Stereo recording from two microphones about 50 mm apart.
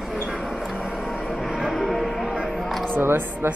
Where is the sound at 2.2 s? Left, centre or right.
Centre.